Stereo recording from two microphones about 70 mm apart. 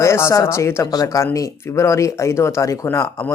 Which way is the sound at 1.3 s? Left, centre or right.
Left.